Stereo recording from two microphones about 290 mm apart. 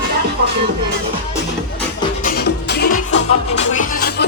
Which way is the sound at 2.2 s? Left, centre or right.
Left.